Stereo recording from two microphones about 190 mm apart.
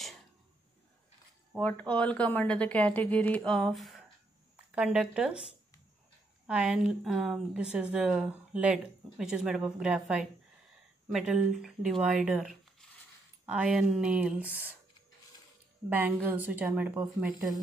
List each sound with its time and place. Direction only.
1.6 s a woman's voice: 10° left (ahead or behind); by 14.8 s 5° right (ahead or behind)
16.3 s speech: 10° right (ahead or behind)